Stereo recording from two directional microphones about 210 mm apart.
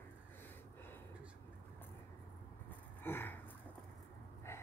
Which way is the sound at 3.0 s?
10° left (ahead or behind).